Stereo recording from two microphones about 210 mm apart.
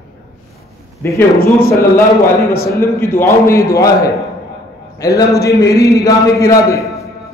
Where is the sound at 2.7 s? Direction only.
10° left (ahead or behind).